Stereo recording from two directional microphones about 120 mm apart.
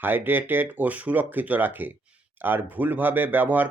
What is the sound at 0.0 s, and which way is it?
Speech, 15° right (ahead or behind).